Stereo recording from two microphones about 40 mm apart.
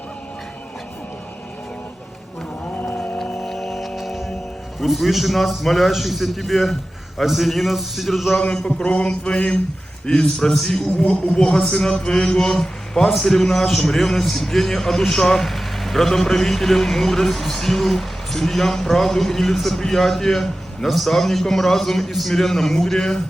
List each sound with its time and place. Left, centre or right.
2.7 s a sound: left
3.4 s music: centre
4.8 s a man's voice: centre
8.6 s a sound: left
10.1 s a man's voice: centre
10.9 s a man's voice: left; by 23.2 s centre